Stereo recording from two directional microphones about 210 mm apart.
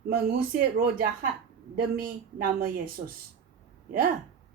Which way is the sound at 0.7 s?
45° right (ahead or behind).